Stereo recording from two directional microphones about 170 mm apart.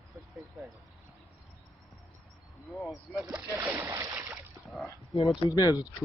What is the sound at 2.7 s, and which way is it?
Speech, 5° left (ahead or behind).